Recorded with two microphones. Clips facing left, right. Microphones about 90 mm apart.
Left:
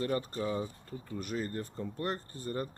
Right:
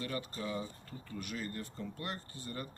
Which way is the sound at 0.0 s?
40° left (ahead or behind).